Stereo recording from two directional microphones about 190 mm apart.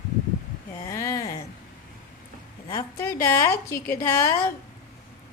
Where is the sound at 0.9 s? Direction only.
15° left (ahead or behind).